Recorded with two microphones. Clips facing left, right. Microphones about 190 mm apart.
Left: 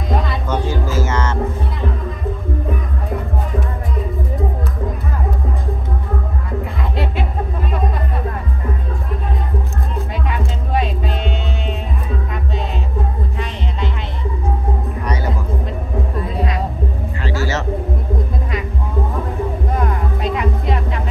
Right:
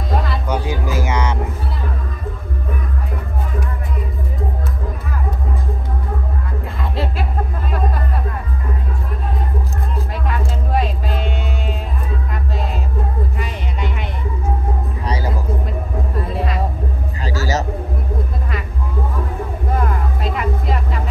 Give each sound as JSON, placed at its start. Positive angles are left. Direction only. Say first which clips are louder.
{"t": 0.1, "sound": "a sound", "louder": "left 1 dB", "side_deg": 0}
{"t": 0.5, "sound": "a sound", "louder": "left 1 dB", "side_deg": -15}
{"t": 9.9, "sound": "music", "louder": "left 1 dB", "side_deg": 0}
{"t": 15.0, "sound": "music", "louder": "even", "side_deg": -35}
{"t": 16.3, "sound": "music", "louder": "left 1 dB", "side_deg": 0}
{"t": 17.2, "sound": "music", "louder": "right 1 dB", "side_deg": -40}
{"t": 19.7, "sound": "music", "louder": "left 1 dB", "side_deg": 0}